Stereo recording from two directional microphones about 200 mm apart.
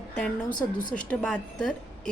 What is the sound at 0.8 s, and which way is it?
Speech, 40° left (ahead or behind).